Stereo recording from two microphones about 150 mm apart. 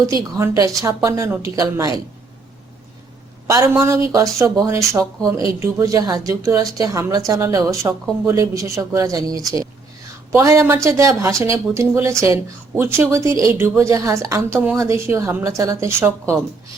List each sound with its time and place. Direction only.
0.0 s speech: 20° right (ahead or behind)
3.4 s speech: 20° right (ahead or behind)